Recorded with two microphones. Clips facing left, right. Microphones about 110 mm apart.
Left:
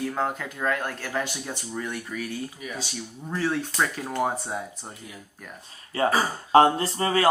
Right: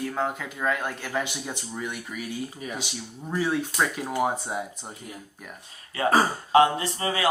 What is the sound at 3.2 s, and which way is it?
Speech, 5° right (ahead or behind).